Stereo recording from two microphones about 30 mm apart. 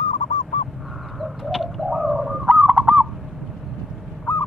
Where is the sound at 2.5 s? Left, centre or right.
Right.